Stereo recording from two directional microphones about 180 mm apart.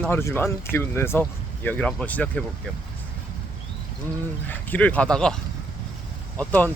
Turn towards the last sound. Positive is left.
turn(degrees=10)  # may be behind; listen again after turning